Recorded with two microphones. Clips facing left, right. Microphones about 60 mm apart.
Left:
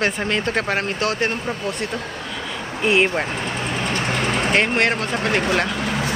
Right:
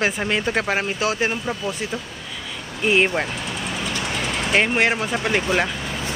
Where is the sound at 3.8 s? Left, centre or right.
Left.